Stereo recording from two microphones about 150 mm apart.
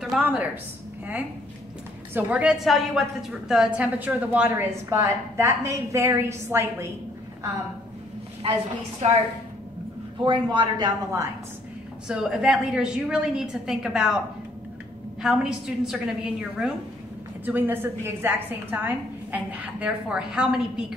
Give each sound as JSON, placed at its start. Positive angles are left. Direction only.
{"t": 0.0, "sound": "a woman's voice", "side_deg": -5}
{"t": 2.1, "sound": "a woman's voice", "side_deg": -10}
{"t": 9.0, "sound": "a woman's voice", "side_deg": -50}
{"t": 10.2, "sound": "speech", "side_deg": -30}
{"t": 12.1, "sound": "a woman's voice", "side_deg": -5}
{"t": 15.2, "sound": "a woman's voice", "side_deg": -5}